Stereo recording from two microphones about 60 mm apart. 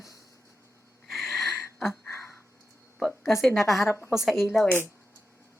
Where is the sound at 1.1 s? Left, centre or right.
Centre.